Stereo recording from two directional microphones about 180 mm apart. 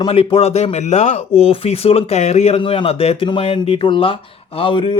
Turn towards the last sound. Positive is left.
turn(degrees=25)  # may be behind; listen again after turning